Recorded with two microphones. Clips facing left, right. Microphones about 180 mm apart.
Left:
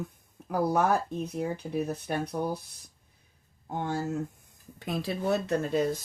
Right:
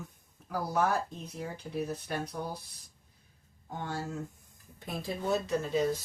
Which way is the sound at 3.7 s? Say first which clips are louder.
Left 6 dB; 55° left (ahead or behind).